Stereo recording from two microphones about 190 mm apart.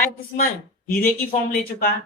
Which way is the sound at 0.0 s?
50° left (ahead or behind).